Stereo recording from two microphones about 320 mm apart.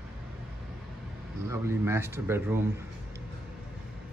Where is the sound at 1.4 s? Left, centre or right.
Centre.